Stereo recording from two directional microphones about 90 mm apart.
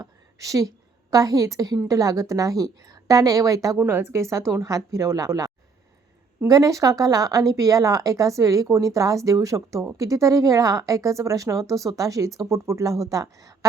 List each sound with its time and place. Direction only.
0.0 s a sound: 35° right (ahead or behind)
1.1 s speech: 40° right (ahead or behind)
3.8 s speech: 25° right (ahead or behind)
6.5 s speech: 40° right (ahead or behind)